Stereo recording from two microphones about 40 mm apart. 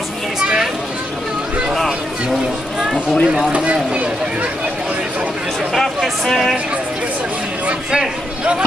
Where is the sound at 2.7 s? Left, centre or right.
Right.